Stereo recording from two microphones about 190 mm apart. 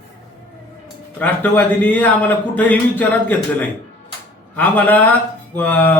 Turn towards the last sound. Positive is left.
turn(degrees=10)  # may be behind; listen again after turning